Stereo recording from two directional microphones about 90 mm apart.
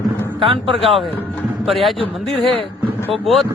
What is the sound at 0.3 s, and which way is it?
Speech, 80° right.